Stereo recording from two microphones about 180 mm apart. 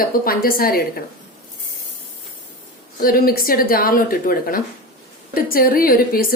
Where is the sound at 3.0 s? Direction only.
55° left (ahead or behind).